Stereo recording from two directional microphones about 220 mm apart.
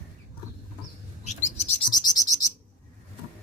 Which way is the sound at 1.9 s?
15° left (ahead or behind).